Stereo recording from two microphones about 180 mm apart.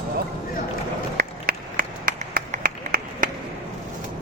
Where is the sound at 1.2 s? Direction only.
50° right (ahead or behind).